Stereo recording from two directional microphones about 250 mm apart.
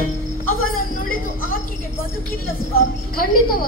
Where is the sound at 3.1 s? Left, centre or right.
Left.